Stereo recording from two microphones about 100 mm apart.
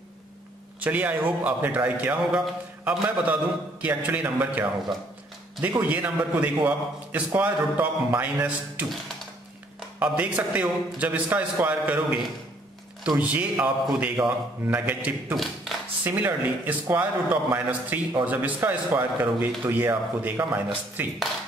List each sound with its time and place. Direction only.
0.7 s a man's voice: 15° right (ahead or behind)
10.0 s a man's voice: 15° right (ahead or behind)
13.2 s a man's voice: 15° right (ahead or behind)